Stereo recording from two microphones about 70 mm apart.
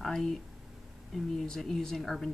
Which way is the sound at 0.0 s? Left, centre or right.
Centre.